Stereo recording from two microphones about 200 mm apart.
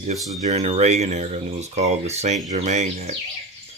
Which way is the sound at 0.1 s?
30° right (ahead or behind).